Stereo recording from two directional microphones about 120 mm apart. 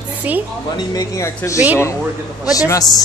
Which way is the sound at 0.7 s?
30° left (ahead or behind).